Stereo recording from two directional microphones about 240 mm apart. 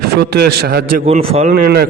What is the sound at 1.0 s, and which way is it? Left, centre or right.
Speech, right.